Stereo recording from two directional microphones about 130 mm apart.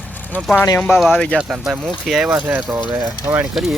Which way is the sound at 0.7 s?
20° left (ahead or behind).